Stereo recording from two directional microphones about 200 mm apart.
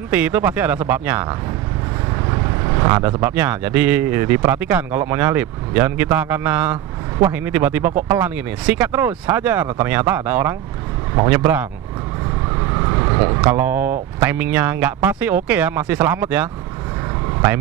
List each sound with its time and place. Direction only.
0.1 s speech: 10° right (ahead or behind)
2.6 s speech: 20° right (ahead or behind)
12.7 s vehicle: 20° right (ahead or behind)
14.2 s speech: 10° right (ahead or behind)